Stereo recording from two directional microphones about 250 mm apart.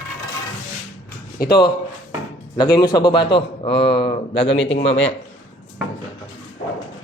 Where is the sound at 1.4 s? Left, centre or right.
Left.